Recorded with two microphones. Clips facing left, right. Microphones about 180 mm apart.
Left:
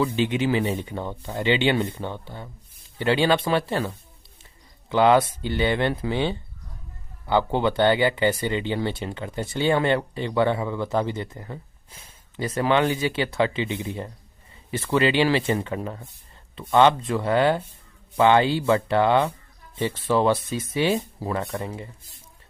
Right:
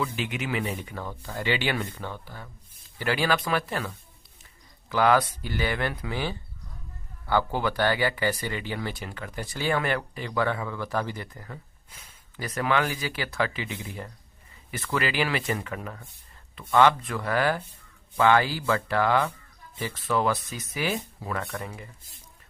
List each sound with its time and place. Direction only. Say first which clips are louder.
0.0 s speech: left 8 dB; 30° left (ahead or behind)